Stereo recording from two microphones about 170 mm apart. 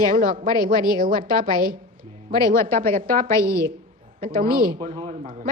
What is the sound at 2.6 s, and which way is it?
Speech, 15° left (ahead or behind).